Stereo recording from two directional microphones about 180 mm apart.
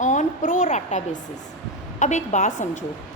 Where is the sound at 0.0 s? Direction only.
45° left (ahead or behind).